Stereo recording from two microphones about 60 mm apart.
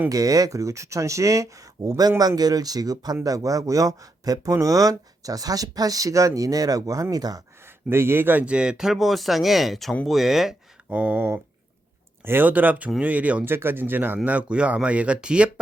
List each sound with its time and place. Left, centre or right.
0.1 s speech: right
3.2 s speech: right
7.9 s speech: right
8.4 s speech: centre
10.8 s speech: right
12.2 s speech: right
12.5 s speech: right
13.4 s speech: right
14.3 s speech: right